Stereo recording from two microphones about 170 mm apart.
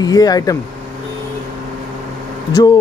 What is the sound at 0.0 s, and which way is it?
Speech, 20° left (ahead or behind).